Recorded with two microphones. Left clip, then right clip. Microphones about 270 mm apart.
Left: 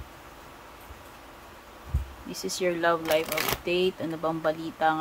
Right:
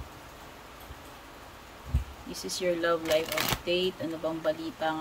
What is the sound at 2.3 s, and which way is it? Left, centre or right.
Speech, centre.